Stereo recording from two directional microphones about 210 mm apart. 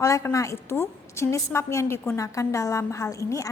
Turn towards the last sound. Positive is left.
turn(degrees=15)  # may be behind; listen again after turning